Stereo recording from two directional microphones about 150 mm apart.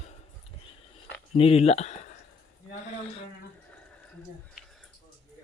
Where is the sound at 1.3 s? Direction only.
40° left (ahead or behind).